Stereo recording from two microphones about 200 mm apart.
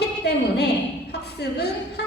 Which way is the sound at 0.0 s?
55° left (ahead or behind).